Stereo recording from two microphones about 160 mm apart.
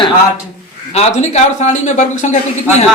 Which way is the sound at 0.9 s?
45° left (ahead or behind).